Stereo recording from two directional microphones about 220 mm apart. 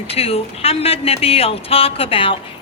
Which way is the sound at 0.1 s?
25° left (ahead or behind).